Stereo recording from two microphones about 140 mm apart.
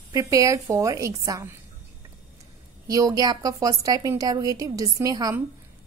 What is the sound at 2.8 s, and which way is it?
A woman's voice, 25° right (ahead or behind).